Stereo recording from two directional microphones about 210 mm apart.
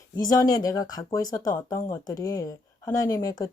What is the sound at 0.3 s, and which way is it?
Speech, 15° left (ahead or behind).